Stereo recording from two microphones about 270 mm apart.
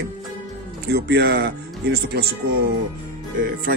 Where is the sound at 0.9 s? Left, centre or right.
Right.